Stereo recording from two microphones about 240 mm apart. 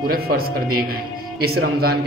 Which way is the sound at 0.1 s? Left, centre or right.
Right.